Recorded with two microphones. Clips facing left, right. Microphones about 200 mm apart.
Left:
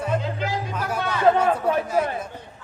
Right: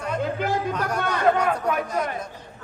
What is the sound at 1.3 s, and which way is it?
Speech, 30° left (ahead or behind).